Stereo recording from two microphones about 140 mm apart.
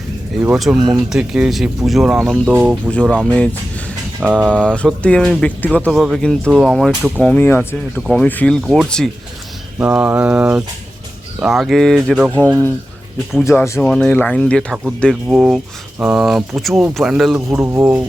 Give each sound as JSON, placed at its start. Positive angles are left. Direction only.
{"t": 0.5, "sound": "speech", "side_deg": 0}
{"t": 2.6, "sound": "mantra", "side_deg": -10}
{"t": 2.9, "sound": "speech", "side_deg": 5}
{"t": 4.2, "sound": "mantra", "side_deg": -10}
{"t": 4.5, "sound": "speech", "side_deg": 5}
{"t": 5.9, "sound": "speech", "side_deg": 0}
{"t": 8.0, "sound": "speech", "side_deg": 5}
{"t": 9.7, "sound": "mantra", "side_deg": -10}
{"t": 11.3, "sound": "speech", "side_deg": -5}
{"t": 13.4, "sound": "speech", "side_deg": 20}
{"t": 13.8, "sound": "speech", "side_deg": 5}
{"t": 17.6, "sound": "mantra", "side_deg": -20}